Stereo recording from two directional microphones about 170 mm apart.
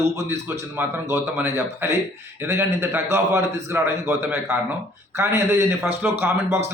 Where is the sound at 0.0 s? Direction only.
15° right (ahead or behind).